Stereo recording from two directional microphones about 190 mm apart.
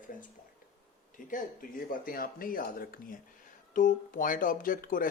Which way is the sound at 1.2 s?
45° left (ahead or behind).